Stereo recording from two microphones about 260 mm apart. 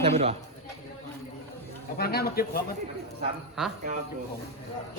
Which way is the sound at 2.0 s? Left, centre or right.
Left.